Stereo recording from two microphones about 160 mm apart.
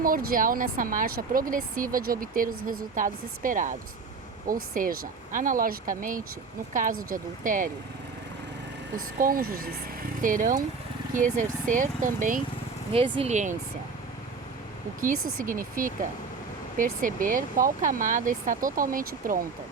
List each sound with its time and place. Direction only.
0.0 s speech: 60° right (ahead or behind)
9.1 s speech: 65° right (ahead or behind)
12.9 s speech: 35° right (ahead or behind)
13.3 s speech: 50° right (ahead or behind)
15.0 s speech: 60° right (ahead or behind)